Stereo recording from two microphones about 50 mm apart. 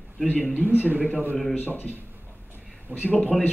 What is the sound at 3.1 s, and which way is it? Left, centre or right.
Speech, left.